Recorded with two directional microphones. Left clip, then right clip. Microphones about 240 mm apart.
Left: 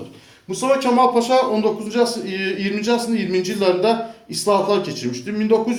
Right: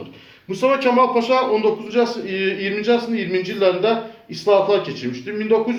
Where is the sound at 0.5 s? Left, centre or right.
Left.